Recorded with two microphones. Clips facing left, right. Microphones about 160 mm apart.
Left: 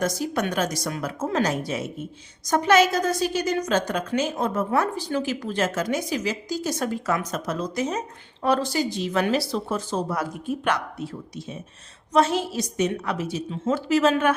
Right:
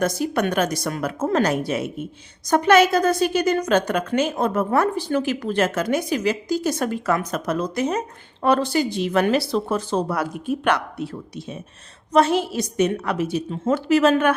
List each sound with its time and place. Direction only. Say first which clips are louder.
0.0 s a woman's voice: right 4 dB; 60° right (ahead or behind)